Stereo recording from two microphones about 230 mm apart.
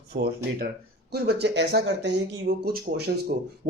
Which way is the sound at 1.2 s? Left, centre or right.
Right.